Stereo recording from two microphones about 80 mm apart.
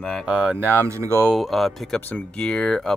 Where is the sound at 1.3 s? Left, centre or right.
Centre.